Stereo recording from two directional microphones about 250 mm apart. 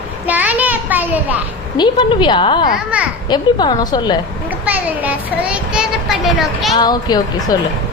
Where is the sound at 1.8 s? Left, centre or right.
Centre.